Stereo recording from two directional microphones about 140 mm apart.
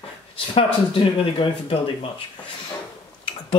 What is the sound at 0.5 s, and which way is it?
Speech, 35° left (ahead or behind).